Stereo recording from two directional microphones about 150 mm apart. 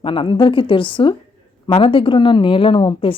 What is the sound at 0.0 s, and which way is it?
Speech, 35° left (ahead or behind).